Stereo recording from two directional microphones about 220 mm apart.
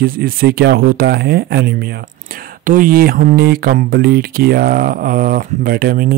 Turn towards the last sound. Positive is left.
turn(degrees=-45)  # may be behind; listen again after turning